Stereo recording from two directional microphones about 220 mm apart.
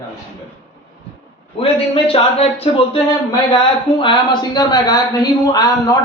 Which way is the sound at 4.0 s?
20° left (ahead or behind).